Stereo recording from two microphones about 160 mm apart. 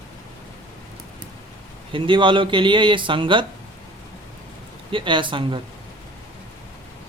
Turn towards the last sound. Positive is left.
turn(degrees=-30)  # may be behind; listen again after turning